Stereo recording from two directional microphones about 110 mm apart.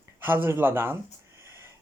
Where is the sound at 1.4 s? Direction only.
25° right (ahead or behind).